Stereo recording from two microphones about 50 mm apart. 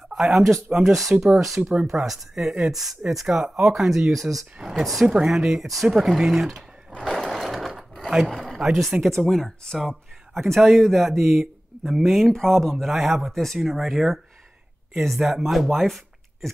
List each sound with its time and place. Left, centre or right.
0.1 s speech: centre
0.7 s speech: centre
3.4 s speech: centre
5.0 s speech: centre
5.3 s speech: centre
7.1 s skateboard: centre
8.3 s a sound: centre
8.5 s speech: centre